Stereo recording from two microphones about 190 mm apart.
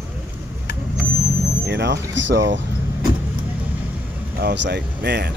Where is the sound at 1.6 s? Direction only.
65° right (ahead or behind).